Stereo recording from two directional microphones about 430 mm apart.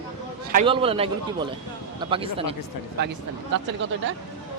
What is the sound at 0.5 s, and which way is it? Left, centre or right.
A man's voice, centre.